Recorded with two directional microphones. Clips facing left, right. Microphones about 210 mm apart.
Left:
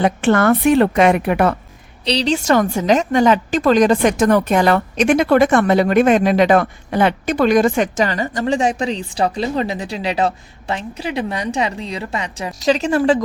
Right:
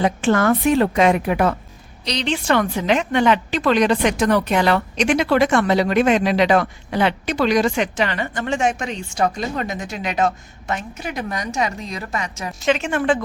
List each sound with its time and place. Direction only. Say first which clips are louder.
0.0 s a woman's voice: left 3 dB; 65° left (ahead or behind)
2.0 s a woman's voice: left 4 dB; 35° left (ahead or behind)